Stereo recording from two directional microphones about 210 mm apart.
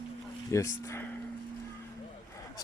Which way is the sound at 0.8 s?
15° left (ahead or behind).